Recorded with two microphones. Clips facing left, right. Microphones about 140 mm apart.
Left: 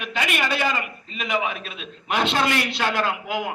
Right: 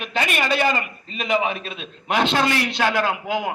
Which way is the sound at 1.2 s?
30° right (ahead or behind).